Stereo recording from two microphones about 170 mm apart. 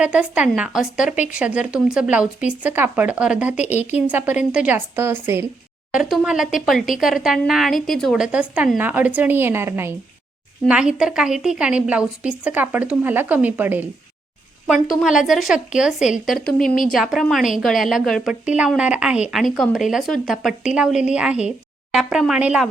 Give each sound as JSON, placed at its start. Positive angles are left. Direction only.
{"t": 0.0, "sound": "a woman's voice", "side_deg": -5}